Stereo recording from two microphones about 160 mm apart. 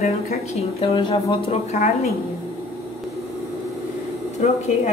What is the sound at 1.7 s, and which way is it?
Speech, 50° left (ahead or behind).